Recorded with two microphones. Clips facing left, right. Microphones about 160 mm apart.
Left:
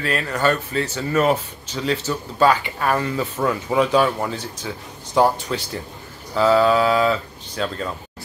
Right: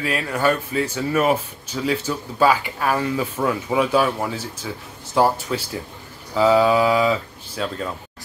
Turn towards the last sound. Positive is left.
turn(degrees=-5)  # may be behind; listen again after turning